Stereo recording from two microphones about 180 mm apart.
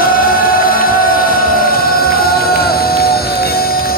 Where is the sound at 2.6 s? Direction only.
60° left (ahead or behind).